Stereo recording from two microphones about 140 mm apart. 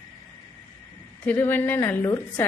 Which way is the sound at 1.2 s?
15° left (ahead or behind).